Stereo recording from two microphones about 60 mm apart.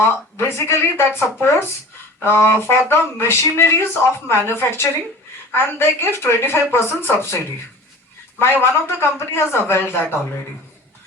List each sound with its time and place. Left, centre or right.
0.0 s speech: left
8.4 s speech: left